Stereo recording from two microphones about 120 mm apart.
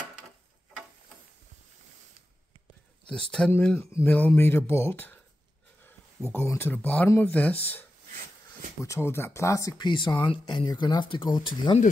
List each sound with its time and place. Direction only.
3.1 s speech: 5° left (ahead or behind)
6.3 s speech: 20° left (ahead or behind)
8.8 s speech: 20° left (ahead or behind); by 11.7 s 40° left (ahead or behind)